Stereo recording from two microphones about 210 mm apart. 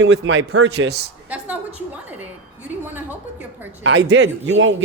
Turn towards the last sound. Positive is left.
turn(degrees=-65)  # may be behind; listen again after turning